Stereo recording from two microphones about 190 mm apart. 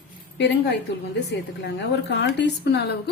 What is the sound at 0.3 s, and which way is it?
A woman's voice, 65° left (ahead or behind).